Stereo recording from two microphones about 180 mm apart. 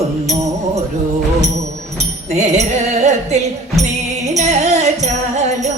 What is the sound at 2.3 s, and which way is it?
Music, 40° right (ahead or behind).